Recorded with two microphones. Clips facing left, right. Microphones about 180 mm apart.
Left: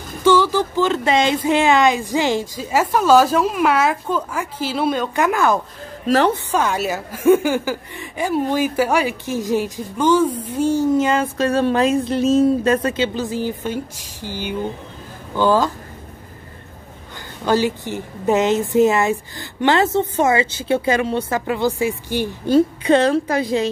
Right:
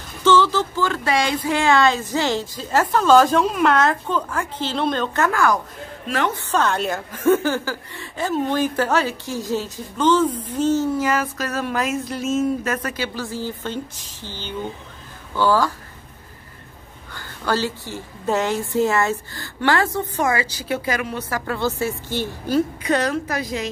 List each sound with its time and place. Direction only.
0.2 s speech: 10° left (ahead or behind)
6.0 s a woman's voice: 35° left (ahead or behind)
6.5 s a woman's voice: 10° left (ahead or behind)
17.1 s a woman's voice: 20° left (ahead or behind)
21.5 s speech: 15° left (ahead or behind)
22.5 s a woman's voice: 25° left (ahead or behind)